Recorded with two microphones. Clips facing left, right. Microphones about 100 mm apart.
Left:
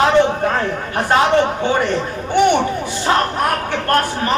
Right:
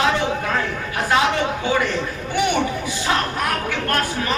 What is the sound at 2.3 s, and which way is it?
Speech, 50° left (ahead or behind).